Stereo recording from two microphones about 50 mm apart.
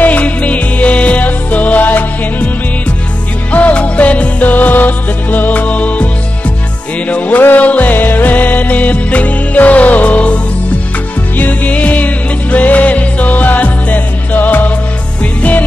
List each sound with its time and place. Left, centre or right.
0.0 s music: left
3.5 s music: left
7.1 s music: left